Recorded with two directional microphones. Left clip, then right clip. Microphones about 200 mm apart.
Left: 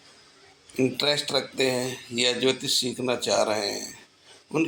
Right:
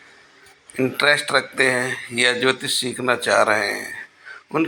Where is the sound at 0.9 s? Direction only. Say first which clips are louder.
Right 11 dB; 5° right (ahead or behind).